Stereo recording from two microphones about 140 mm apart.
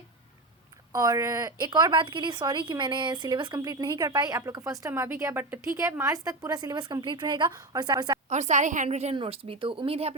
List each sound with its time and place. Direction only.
0.9 s a woman's voice: 25° right (ahead or behind)
8.3 s a woman's voice: 55° right (ahead or behind)
9.1 s speech: 40° right (ahead or behind)